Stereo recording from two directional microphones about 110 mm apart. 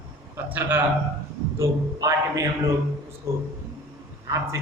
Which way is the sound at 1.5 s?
30° right (ahead or behind).